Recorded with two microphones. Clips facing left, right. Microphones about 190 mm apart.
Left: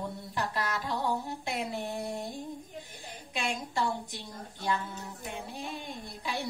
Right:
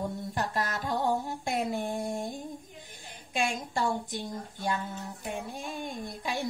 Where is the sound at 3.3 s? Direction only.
50° right (ahead or behind).